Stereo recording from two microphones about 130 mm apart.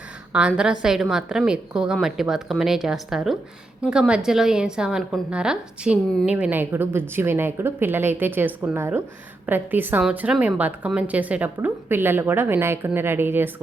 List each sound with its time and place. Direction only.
0.3 s a woman's voice: 5° right (ahead or behind)